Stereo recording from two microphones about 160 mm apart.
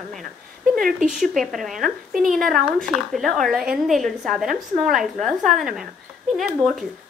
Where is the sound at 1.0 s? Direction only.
Centre (ahead or behind).